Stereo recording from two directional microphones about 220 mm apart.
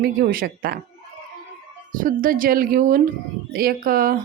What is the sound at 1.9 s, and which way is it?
Speech, 40° right (ahead or behind).